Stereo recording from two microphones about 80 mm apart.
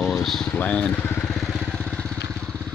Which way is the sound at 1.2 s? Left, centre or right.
Centre.